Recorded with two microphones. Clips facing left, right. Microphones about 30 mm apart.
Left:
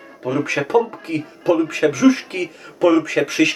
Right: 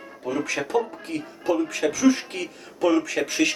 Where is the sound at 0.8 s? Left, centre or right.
Left.